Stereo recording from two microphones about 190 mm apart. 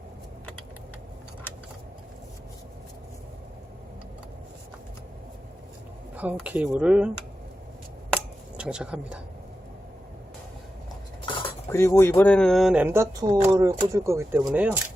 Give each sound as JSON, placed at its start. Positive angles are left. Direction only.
{"t": 6.1, "sound": "speech", "side_deg": -10}
{"t": 8.5, "sound": "speech", "side_deg": -5}
{"t": 11.7, "sound": "speech", "side_deg": 15}